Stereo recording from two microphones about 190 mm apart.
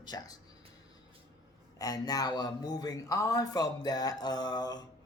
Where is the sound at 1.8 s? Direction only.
20° left (ahead or behind).